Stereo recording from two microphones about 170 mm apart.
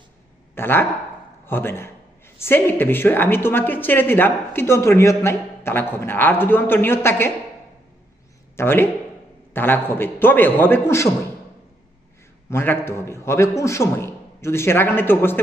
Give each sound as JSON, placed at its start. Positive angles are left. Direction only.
{"t": 0.5, "sound": "speech", "side_deg": 15}
{"t": 8.5, "sound": "speech", "side_deg": 15}
{"t": 12.5, "sound": "speech", "side_deg": 15}